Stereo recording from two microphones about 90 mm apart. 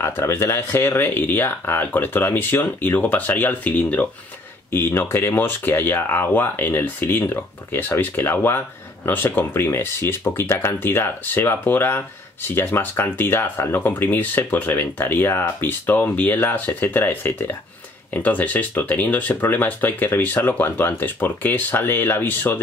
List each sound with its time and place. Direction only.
0.0 s speech: 30° left (ahead or behind)